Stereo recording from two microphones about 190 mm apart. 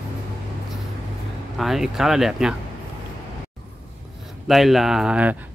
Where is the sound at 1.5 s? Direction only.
Centre (ahead or behind).